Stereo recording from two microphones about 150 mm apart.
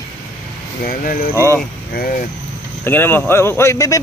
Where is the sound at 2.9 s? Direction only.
15° left (ahead or behind).